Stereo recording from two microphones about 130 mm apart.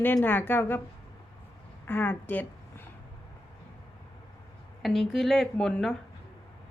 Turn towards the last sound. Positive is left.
turn(degrees=5)  # may be behind; listen again after turning